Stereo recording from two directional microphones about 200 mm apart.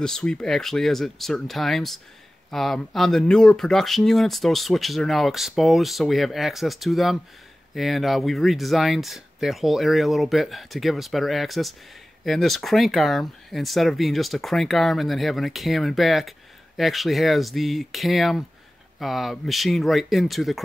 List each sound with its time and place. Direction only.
0.0 s speech: 5° left (ahead or behind)